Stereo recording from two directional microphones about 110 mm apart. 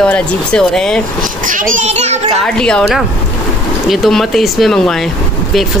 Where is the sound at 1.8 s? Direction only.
90° right.